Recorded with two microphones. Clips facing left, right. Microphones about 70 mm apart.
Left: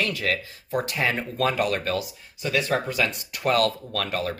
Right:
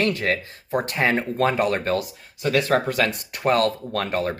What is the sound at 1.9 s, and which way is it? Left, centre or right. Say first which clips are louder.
Speech: right 3 dB; right.